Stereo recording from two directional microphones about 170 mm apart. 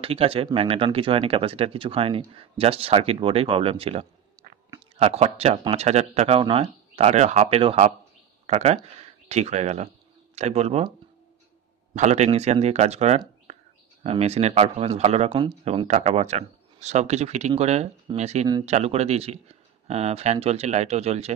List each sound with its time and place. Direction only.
0.0 s speech: 35° right (ahead or behind)
11.9 s speech: 40° right (ahead or behind)
13.5 s whispering: 35° right (ahead or behind)
14.0 s speech: 35° right (ahead or behind)